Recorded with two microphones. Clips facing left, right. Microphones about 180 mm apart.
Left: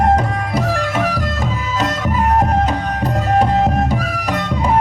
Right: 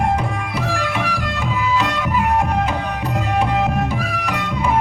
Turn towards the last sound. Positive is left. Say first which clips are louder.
# left 2 dB
turn(degrees=40)  # may be behind; listen again after turning